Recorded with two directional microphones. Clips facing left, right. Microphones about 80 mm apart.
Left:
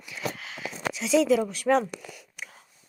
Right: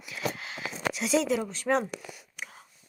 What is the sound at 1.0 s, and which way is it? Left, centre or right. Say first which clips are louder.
Speech: left 5 dB; centre.